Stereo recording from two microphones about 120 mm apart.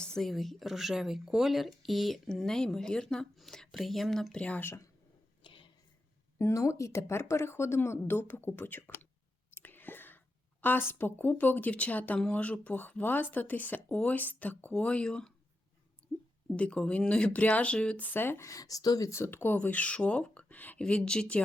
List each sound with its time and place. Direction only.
0.0 s speech: 5° left (ahead or behind); by 4.9 s 20° left (ahead or behind)
5.4 s a sound: 45° left (ahead or behind)
6.4 s speech: 25° left (ahead or behind)
9.6 s whispering: 15° left (ahead or behind)
10.6 s speech: 15° left (ahead or behind)
16.6 s speech: 10° left (ahead or behind)